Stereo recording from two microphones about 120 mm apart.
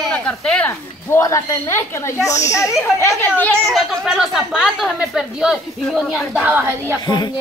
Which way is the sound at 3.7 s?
Centre (ahead or behind).